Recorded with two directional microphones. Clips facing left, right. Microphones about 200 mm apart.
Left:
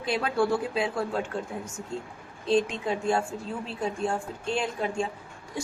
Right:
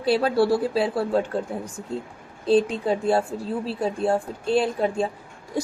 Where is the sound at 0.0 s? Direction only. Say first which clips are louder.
Right 6 dB; 35° right (ahead or behind).